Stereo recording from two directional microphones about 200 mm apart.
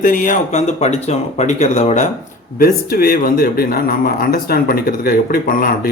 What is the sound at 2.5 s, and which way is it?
Speech, 50° left (ahead or behind).